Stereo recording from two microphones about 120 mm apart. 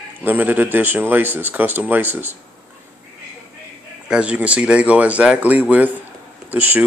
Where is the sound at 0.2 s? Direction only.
15° right (ahead or behind).